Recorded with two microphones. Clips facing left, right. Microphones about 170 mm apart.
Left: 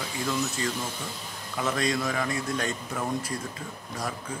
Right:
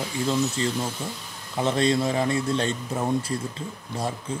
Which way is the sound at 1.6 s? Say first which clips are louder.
Right 5 dB; 30° right (ahead or behind).